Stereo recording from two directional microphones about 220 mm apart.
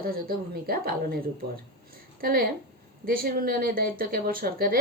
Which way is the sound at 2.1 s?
40° right (ahead or behind).